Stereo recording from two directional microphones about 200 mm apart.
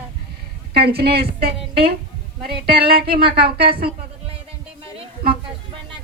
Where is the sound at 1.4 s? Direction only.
30° right (ahead or behind).